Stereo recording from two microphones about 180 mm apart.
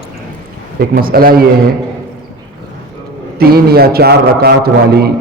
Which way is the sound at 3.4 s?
60° right (ahead or behind).